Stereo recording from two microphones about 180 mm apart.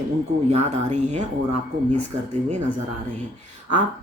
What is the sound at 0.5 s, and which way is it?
Speech, 40° right (ahead or behind).